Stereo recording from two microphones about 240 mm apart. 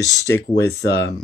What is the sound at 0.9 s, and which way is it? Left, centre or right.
Speech, left.